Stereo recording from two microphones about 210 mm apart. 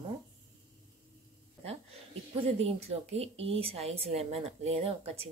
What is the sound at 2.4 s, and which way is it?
A woman's voice, 30° right (ahead or behind).